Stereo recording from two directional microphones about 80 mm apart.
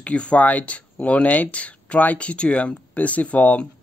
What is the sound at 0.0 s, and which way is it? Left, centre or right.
Speech, centre.